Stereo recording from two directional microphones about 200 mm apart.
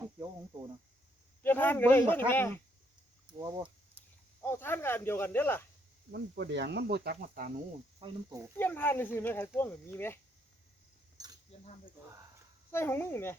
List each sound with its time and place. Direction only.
1.4 s speech: 10° left (ahead or behind)
3.4 s a sound: 25° right (ahead or behind)
4.4 s speech: 10° left (ahead or behind)
6.1 s speech: 55° right (ahead or behind)
7.9 s speech: 25° right (ahead or behind)
8.5 s speech: 10° left (ahead or behind)
11.5 s speech: 30° left (ahead or behind)
12.7 s speech: 10° left (ahead or behind)